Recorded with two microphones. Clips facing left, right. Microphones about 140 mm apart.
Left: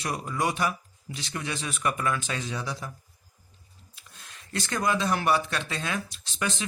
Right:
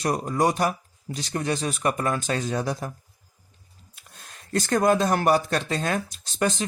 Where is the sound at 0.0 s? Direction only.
40° right (ahead or behind).